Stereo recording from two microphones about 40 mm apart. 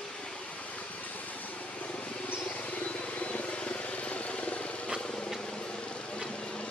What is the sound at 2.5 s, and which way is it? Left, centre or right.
Vehicle, left.